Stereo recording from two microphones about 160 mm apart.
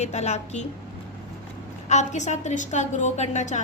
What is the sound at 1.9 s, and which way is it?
A woman's voice, 45° left (ahead or behind).